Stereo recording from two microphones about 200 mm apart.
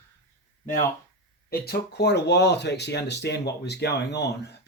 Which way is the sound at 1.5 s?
50° left (ahead or behind).